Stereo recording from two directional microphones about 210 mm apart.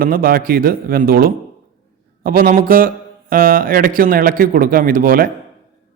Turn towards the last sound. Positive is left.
turn(degrees=-40)  # may be behind; listen again after turning